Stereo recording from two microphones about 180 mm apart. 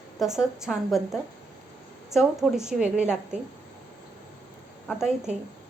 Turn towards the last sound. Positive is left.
turn(degrees=-5)  # may be behind; listen again after turning